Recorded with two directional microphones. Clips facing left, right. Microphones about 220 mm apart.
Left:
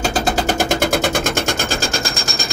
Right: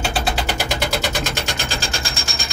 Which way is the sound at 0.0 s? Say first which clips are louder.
Left 5 dB; 45° left (ahead or behind).